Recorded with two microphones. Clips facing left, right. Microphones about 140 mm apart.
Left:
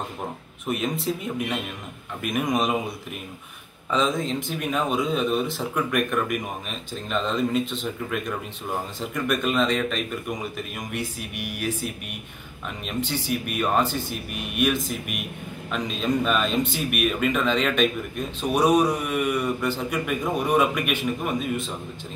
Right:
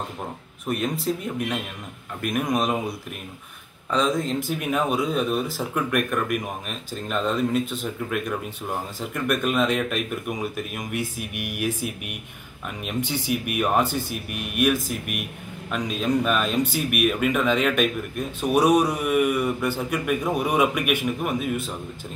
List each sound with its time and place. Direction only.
0.7 s speech: centre (ahead or behind)
3.9 s a man's voice: centre (ahead or behind)